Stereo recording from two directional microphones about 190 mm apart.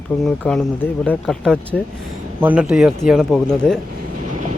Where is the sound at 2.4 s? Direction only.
5° right (ahead or behind).